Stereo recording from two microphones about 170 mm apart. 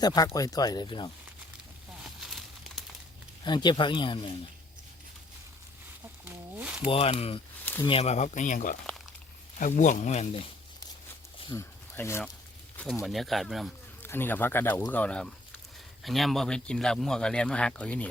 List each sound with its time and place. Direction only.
0.0 s speech: 25° left (ahead or behind)
2.0 s a sound: centre (ahead or behind)
3.4 s speech: 25° left (ahead or behind)
6.2 s a sound: 10° right (ahead or behind)
6.9 s speech: 35° left (ahead or behind)
7.6 s a sound: 10° left (ahead or behind)
7.9 s speech: 35° left (ahead or behind)
11.5 s speech: 15° left (ahead or behind)
12.7 s speech: 5° left (ahead or behind)
14.0 s speech: 10° left (ahead or behind)